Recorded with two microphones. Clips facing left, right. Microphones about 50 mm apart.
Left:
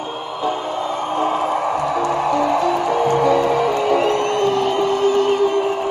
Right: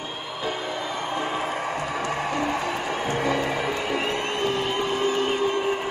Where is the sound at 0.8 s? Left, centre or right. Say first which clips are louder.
Left 9 dB; left.